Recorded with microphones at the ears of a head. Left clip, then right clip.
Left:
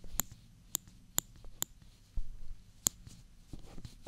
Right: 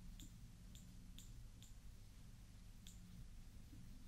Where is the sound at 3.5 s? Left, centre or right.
Left.